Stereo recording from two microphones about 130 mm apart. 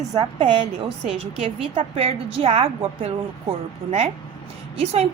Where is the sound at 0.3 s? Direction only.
40° right (ahead or behind).